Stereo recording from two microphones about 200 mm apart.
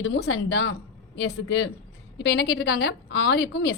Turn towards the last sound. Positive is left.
turn(degrees=55)  # may be behind; listen again after turning